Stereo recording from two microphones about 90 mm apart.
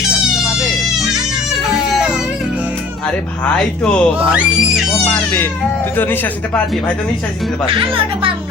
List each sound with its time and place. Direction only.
1.7 s music: 5° right (ahead or behind)
3.4 s speech: 10° left (ahead or behind)
4.3 s speech: 5° right (ahead or behind)
5.0 s speech: 25° left (ahead or behind)
7.7 s speech: 80° right